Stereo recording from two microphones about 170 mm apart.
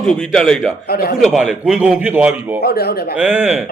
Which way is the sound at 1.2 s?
5° right (ahead or behind).